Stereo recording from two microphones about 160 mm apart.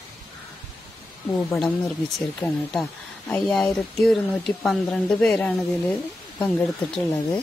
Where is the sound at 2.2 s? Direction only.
Centre (ahead or behind).